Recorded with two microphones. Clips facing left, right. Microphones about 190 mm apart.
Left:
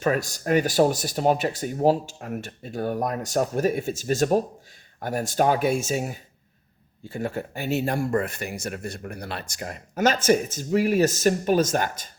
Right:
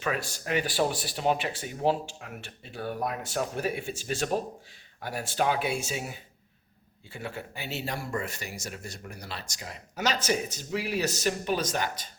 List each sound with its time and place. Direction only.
0.0 s speech: 45° left (ahead or behind)